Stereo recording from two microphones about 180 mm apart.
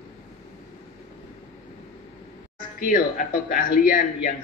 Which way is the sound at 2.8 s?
50° left (ahead or behind).